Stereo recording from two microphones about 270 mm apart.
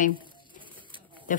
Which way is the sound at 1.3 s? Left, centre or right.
Left.